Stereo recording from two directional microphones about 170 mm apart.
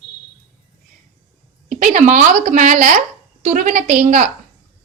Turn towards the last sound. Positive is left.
turn(degrees=-50)  # may be behind; listen again after turning